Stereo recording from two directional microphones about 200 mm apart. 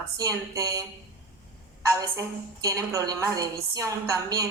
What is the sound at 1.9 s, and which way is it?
A woman's voice, 15° right (ahead or behind).